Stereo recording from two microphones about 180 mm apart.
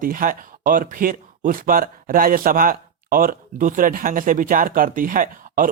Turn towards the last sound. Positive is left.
turn(degrees=-50)  # may be behind; listen again after turning